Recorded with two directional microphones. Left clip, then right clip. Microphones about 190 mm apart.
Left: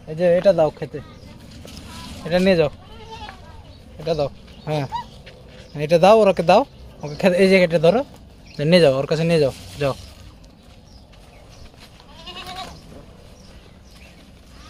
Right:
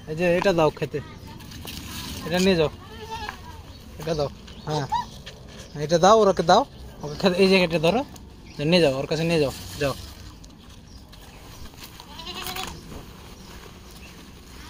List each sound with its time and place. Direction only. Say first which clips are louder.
0.1 s speech: left 6 dB; 15° left (ahead or behind)
2.2 s speech: left 5 dB; 35° left (ahead or behind)
4.0 s speech: left 4 dB; 35° left (ahead or behind)
5.9 s speech: left 4 dB; 45° left (ahead or behind)